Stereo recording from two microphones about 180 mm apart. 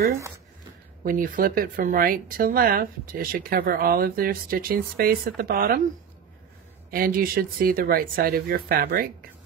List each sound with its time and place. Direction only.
1.0 s speech: 50° right (ahead or behind)
6.9 s speech: 55° right (ahead or behind)